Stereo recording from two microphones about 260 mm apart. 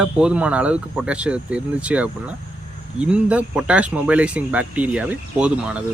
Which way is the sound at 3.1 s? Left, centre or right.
Centre.